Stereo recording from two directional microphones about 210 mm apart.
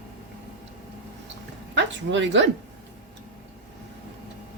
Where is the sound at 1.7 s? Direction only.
60° right (ahead or behind).